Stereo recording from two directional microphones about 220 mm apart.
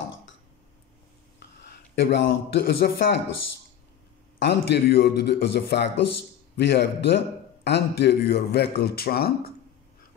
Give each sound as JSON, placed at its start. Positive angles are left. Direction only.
{"t": 2.0, "sound": "a man's voice", "side_deg": 55}
{"t": 4.4, "sound": "a man's voice", "side_deg": 50}